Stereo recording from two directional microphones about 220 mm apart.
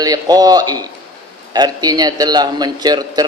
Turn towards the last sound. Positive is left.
turn(degrees=-20)  # may be behind; listen again after turning